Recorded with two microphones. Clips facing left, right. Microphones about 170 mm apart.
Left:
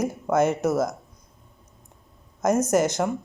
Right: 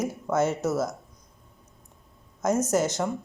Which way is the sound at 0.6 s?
55° left (ahead or behind).